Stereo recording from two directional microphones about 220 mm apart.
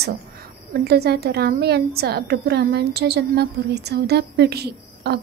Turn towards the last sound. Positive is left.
turn(degrees=-50)  # may be behind; listen again after turning